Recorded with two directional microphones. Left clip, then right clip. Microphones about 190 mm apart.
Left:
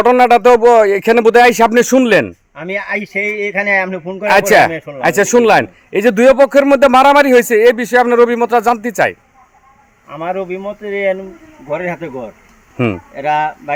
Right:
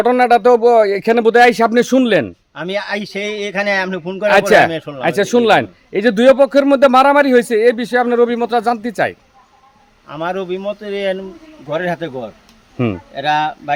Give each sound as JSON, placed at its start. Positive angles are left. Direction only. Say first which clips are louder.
{"t": 0.0, "sound": "a man's voice", "louder": "left 3 dB", "side_deg": 5}
{"t": 2.6, "sound": "a man's voice", "louder": "left 1 dB", "side_deg": -30}
{"t": 4.1, "sound": "a man's voice", "louder": "left 1 dB", "side_deg": 0}
{"t": 10.1, "sound": "a man's voice", "louder": "left 1 dB", "side_deg": -30}
{"t": 12.7, "sound": "speech", "louder": "left 3 dB", "side_deg": -10}